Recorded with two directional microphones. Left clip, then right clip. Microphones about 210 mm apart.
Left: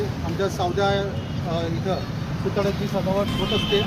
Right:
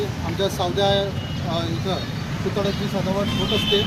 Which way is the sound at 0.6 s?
Centre (ahead or behind).